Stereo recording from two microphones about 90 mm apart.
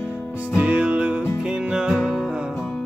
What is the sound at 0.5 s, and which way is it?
Music, 15° right (ahead or behind).